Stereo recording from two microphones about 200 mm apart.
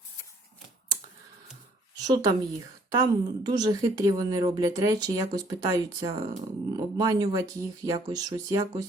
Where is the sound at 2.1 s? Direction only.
15° right (ahead or behind).